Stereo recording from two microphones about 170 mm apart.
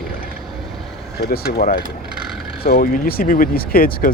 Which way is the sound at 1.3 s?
60° left (ahead or behind).